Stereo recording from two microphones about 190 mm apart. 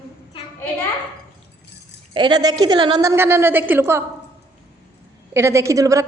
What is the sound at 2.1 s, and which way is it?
A woman's voice, 25° right (ahead or behind).